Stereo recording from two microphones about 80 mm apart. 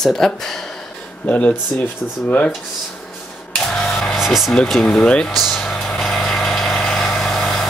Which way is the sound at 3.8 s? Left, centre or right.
Centre.